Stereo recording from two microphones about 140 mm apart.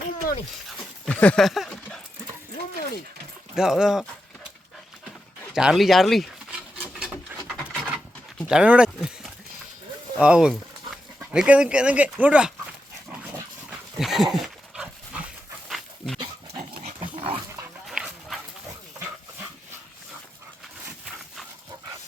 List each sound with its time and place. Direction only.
1.0 s a sound: 10° left (ahead or behind)
3.5 s speech: 5° right (ahead or behind)
5.5 s speech: 5° right (ahead or behind)
6.7 s wood: 10° right (ahead or behind)
7.4 s wood: 5° left (ahead or behind)
8.4 s speech: 5° right (ahead or behind)
13.7 s dog: centre (ahead or behind)
17.2 s dog: 45° right (ahead or behind)
17.8 s dog: 5° right (ahead or behind)